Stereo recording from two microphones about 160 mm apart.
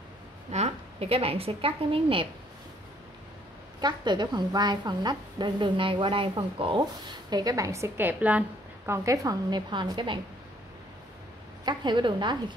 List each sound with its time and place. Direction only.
0.5 s a woman's voice: 45° right (ahead or behind)
3.8 s a woman's voice: 30° right (ahead or behind)
11.6 s a woman's voice: 30° right (ahead or behind)